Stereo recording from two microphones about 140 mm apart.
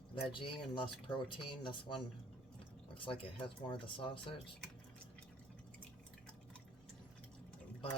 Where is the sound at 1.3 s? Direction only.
35° left (ahead or behind).